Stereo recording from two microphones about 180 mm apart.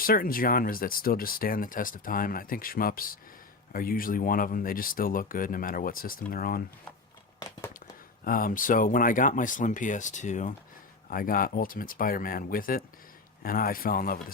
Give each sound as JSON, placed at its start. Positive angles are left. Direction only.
{"t": 0.0, "sound": "speech", "side_deg": 55}
{"t": 8.2, "sound": "speech", "side_deg": 50}